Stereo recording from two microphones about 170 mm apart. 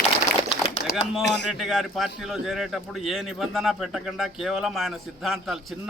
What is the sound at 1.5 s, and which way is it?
A man's voice, centre (ahead or behind).